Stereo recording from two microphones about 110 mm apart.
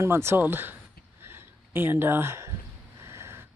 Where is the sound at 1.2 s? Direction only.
20° right (ahead or behind).